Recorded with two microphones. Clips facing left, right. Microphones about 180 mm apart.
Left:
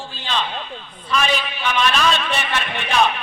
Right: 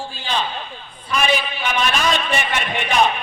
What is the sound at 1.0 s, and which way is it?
Speech, 10° right (ahead or behind).